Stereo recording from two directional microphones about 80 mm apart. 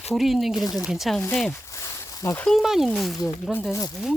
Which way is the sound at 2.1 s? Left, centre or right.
Left.